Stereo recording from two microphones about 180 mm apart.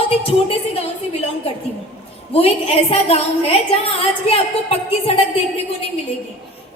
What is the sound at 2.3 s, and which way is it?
A woman's voice, 35° left (ahead or behind).